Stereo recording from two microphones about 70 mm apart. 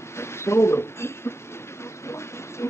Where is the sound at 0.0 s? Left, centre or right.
Left.